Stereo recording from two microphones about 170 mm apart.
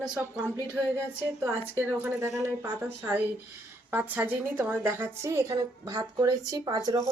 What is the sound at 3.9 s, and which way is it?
A woman's voice, 10° right (ahead or behind).